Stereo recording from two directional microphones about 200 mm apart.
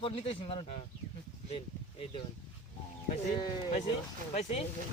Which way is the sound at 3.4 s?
20° left (ahead or behind).